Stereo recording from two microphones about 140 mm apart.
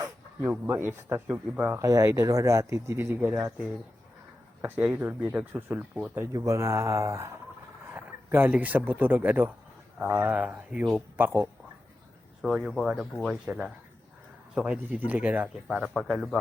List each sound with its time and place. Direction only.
0.4 s speech: 15° right (ahead or behind)
1.8 s speech: 25° right (ahead or behind); by 6.2 s 5° right (ahead or behind)
6.3 s speech: 25° right (ahead or behind)
15.6 s speech: centre (ahead or behind)